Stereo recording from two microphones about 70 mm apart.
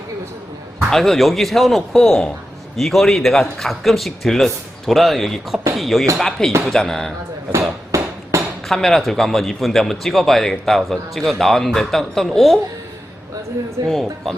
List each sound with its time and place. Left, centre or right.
0.9 s a man's voice: centre
7.9 s a sound: right
8.6 s a man's voice: centre
13.8 s a man's voice: centre